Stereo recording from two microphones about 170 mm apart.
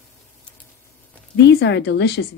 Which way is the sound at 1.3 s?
90° left.